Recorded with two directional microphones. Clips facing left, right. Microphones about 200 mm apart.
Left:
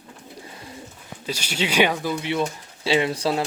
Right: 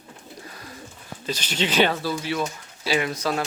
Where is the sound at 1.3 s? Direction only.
10° left (ahead or behind).